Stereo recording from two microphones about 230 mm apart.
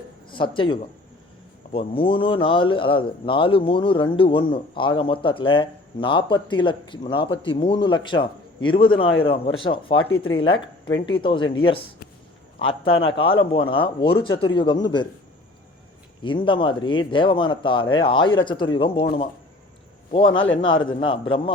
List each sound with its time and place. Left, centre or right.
0.3 s speech: left
16.2 s speech: left
20.1 s speech: left
20.3 s a man's voice: left
21.0 s speech: left